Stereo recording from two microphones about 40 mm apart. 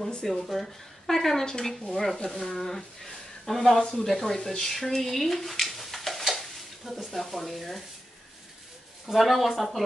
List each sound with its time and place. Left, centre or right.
0.2 s speech: centre
9.0 s speech: centre